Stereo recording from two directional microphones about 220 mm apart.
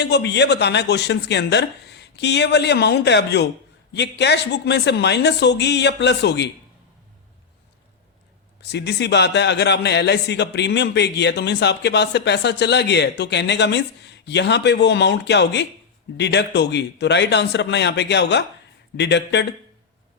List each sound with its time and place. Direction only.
0.0 s a man's voice: 50° left (ahead or behind)
8.6 s a man's voice: 50° left (ahead or behind)